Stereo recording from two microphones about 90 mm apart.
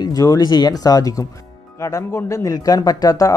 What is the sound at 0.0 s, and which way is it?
Speech, 45° left (ahead or behind).